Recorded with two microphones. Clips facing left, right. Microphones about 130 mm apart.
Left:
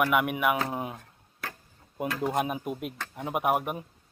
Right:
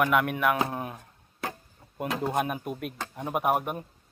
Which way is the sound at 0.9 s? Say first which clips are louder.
Right 4 dB; 20° right (ahead or behind).